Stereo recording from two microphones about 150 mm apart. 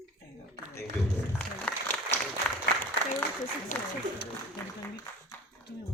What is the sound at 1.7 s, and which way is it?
Applause, 10° left (ahead or behind).